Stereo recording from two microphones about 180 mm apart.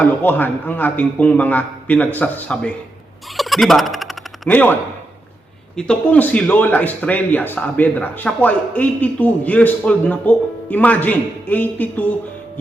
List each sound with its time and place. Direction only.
0.0 s speech: 10° left (ahead or behind)